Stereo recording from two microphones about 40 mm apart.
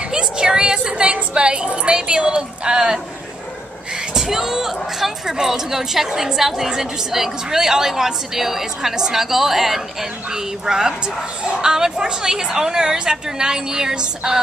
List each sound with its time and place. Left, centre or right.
0.1 s a woman's voice: centre
4.2 s a woman's voice: centre